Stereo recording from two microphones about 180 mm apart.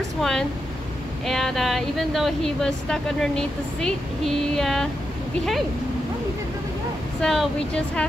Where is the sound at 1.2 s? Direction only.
Centre (ahead or behind).